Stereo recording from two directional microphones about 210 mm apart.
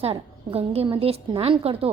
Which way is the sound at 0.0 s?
30° right (ahead or behind).